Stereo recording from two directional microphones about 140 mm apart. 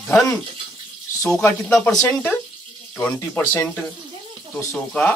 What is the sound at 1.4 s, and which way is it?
Speech, 15° left (ahead or behind).